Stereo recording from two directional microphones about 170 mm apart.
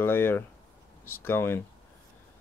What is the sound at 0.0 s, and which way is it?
Speech, 15° left (ahead or behind).